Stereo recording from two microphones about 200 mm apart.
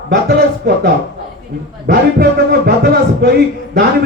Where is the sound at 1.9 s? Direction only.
50° right (ahead or behind).